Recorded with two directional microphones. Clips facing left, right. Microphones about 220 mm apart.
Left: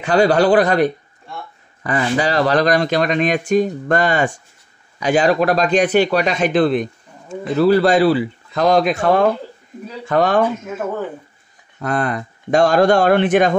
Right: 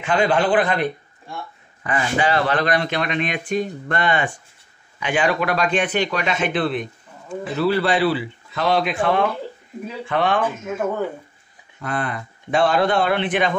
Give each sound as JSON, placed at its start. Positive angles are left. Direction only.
{"t": 0.0, "sound": "speech", "side_deg": 40}
{"t": 11.8, "sound": "speech", "side_deg": 40}